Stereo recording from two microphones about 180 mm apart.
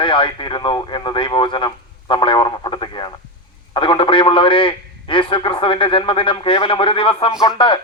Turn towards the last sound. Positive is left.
turn(degrees=25)  # may be behind; listen again after turning